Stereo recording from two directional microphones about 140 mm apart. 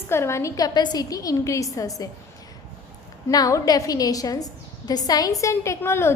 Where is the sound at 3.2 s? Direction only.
25° left (ahead or behind).